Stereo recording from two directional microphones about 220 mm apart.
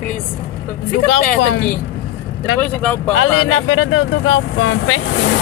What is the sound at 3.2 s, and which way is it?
Speech, 70° left (ahead or behind).